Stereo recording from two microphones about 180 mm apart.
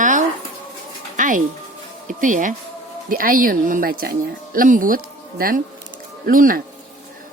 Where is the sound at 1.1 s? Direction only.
45° right (ahead or behind).